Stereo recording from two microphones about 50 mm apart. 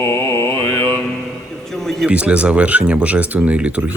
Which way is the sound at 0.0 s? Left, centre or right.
Left.